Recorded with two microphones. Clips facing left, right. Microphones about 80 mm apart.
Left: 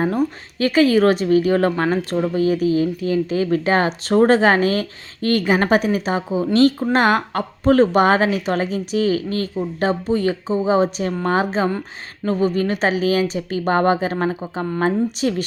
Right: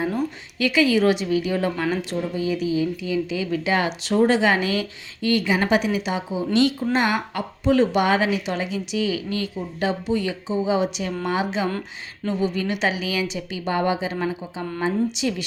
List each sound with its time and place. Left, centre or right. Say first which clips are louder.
0.6 s speech: left 4 dB; left